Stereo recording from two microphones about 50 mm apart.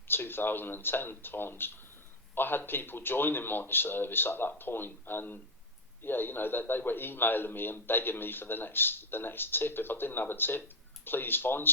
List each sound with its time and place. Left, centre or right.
0.1 s a man's voice: left